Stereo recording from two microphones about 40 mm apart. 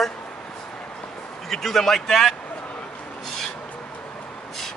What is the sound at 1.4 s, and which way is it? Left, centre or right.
Speech, centre.